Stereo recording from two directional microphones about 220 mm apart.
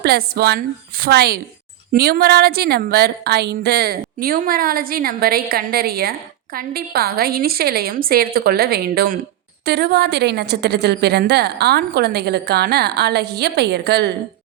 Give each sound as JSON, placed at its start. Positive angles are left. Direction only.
{"t": 0.0, "sound": "a woman's voice", "side_deg": -45}